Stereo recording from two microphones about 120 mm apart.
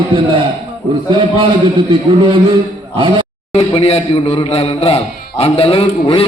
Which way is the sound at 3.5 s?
60° left (ahead or behind).